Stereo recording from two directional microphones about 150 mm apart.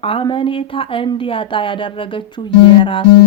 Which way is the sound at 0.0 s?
35° left (ahead or behind).